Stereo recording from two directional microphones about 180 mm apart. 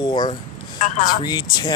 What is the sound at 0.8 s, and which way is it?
Speech, 45° left (ahead or behind).